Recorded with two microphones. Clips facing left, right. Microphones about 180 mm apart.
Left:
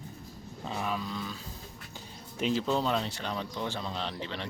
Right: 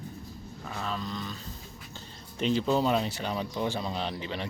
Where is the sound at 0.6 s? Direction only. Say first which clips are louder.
Left 1 dB; 15° left (ahead or behind).